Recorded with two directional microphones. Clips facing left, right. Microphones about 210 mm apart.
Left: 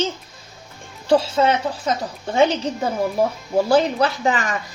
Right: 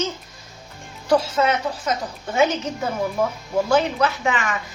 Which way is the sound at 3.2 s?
35° left (ahead or behind).